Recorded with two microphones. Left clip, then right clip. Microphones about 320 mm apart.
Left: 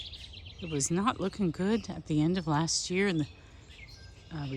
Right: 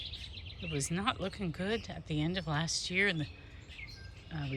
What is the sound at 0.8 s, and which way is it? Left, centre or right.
Speech, centre.